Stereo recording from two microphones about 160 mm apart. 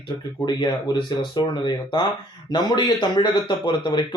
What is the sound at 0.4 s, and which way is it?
Speech, 30° left (ahead or behind).